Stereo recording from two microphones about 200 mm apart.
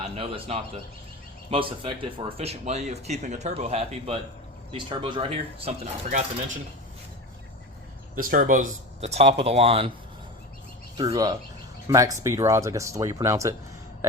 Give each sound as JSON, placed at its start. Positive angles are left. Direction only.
{"t": 0.0, "sound": "speech", "side_deg": -25}
{"t": 8.1, "sound": "speech", "side_deg": -45}
{"t": 10.9, "sound": "speech", "side_deg": -20}